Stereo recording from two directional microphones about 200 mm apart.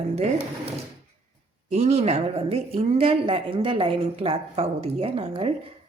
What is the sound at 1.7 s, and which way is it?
Speech, 30° right (ahead or behind).